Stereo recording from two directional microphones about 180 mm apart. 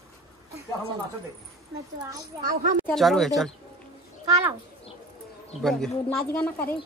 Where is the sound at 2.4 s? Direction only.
50° right (ahead or behind).